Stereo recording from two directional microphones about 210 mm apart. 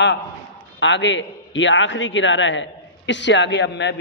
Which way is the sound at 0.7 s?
60° left (ahead or behind).